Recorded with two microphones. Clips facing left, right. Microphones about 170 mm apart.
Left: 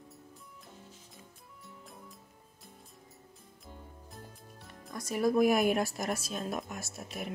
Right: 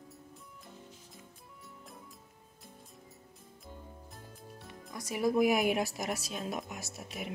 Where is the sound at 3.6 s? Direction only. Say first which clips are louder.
Right 1 dB; centre (ahead or behind).